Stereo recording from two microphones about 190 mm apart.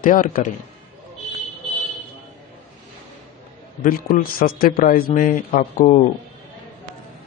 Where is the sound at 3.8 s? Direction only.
50° left (ahead or behind).